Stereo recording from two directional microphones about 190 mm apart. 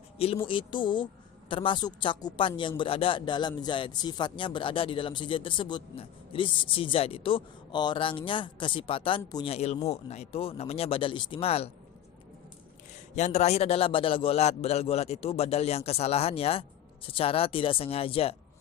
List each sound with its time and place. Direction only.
0.4 s a man's voice: 25° left (ahead or behind)
13.1 s a man's voice: 35° left (ahead or behind)